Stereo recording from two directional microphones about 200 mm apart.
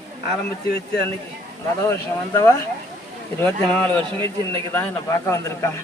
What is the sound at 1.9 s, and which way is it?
A man's voice, 15° left (ahead or behind).